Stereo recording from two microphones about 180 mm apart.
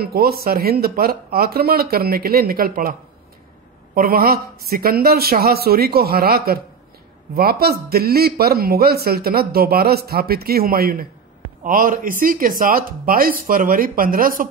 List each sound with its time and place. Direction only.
0.0 s speech: 55° right (ahead or behind)